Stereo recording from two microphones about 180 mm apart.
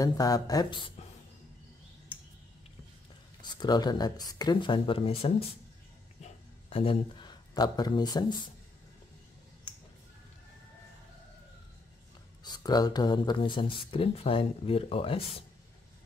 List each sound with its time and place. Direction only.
0.0 s speech: 20° left (ahead or behind)
3.4 s speech: 25° left (ahead or behind)
6.2 s a sound: 30° left (ahead or behind)
12.4 s speech: 20° left (ahead or behind)